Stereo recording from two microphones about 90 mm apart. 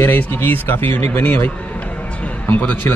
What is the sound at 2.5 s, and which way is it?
Speech, 20° left (ahead or behind).